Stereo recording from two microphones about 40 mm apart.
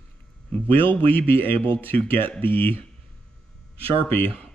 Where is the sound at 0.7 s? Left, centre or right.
Left.